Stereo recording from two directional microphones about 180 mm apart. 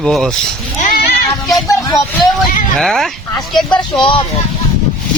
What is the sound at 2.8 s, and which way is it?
Speech, centre (ahead or behind).